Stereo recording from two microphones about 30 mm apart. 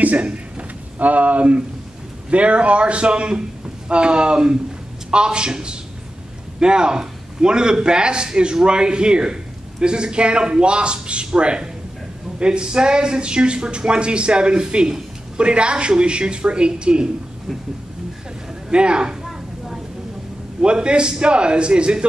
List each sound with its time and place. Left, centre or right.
0.0 s a man's voice: right
18.7 s speech: right
20.6 s speech: right